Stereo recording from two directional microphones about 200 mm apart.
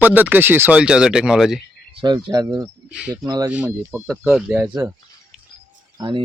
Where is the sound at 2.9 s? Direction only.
5° right (ahead or behind).